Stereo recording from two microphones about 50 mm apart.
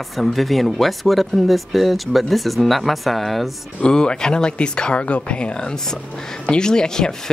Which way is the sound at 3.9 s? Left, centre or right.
Centre.